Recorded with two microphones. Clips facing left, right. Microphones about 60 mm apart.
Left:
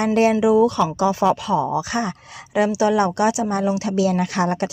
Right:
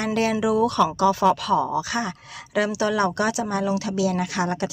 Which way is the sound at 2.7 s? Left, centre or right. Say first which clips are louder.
Left 4 dB; centre.